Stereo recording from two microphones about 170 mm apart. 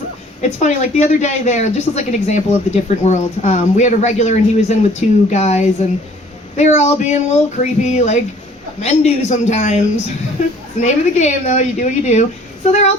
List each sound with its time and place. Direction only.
0.6 s a woman's voice: 45° left (ahead or behind)
10.8 s a woman's voice: 45° left (ahead or behind)